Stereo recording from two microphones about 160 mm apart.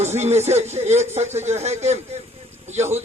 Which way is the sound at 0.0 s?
45° right (ahead or behind).